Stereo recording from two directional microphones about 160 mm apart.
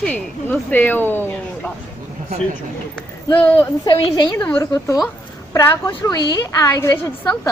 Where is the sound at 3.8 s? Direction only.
25° left (ahead or behind).